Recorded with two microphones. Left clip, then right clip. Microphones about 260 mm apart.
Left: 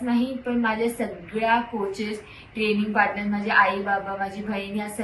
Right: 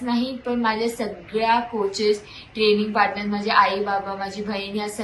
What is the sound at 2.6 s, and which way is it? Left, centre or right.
A woman's voice, centre.